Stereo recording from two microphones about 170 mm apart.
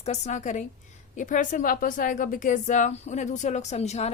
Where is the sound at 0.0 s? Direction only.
45° left (ahead or behind).